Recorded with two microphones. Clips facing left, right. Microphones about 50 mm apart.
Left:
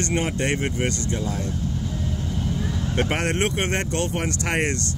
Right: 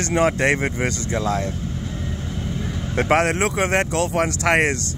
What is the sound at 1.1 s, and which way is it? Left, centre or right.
Speech, right.